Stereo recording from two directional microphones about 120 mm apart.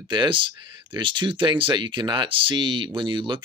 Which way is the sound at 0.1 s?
40° right (ahead or behind).